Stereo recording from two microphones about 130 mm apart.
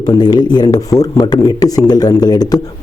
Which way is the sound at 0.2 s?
35° left (ahead or behind).